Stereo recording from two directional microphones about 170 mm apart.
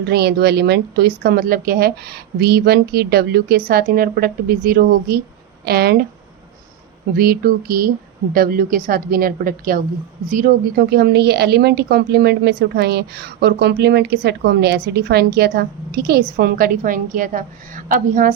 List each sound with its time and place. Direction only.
0.0 s speech: 70° right (ahead or behind)
7.2 s a woman's voice: 60° right (ahead or behind)